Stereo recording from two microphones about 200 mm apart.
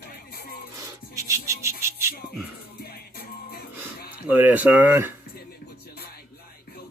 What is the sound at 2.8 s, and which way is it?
Music, 50° left (ahead or behind).